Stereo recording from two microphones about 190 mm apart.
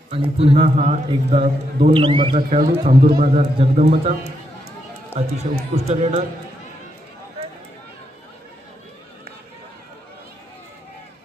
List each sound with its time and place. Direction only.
0.1 s a man's voice: 30° right (ahead or behind)
1.9 s a man's voice: 25° right (ahead or behind)
2.3 s a man's voice: 45° right (ahead or behind)
3.3 s a man's voice: 30° right (ahead or behind)
5.1 s a man's voice: 35° right (ahead or behind)